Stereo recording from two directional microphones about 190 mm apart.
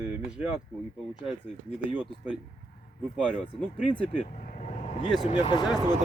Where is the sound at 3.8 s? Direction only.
30° left (ahead or behind).